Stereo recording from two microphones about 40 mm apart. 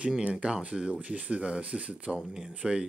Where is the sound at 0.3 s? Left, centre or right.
Right.